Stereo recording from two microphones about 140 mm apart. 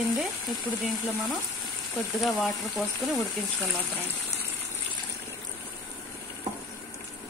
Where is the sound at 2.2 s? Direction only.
Centre (ahead or behind).